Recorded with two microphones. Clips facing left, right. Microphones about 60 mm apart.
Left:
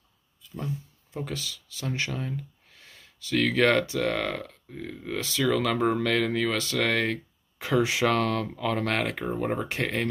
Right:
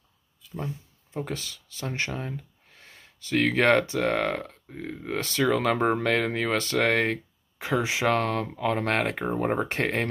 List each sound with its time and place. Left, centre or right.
1.1 s speech: right